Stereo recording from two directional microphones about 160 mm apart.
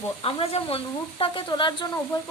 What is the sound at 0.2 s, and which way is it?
A woman's voice, 35° left (ahead or behind).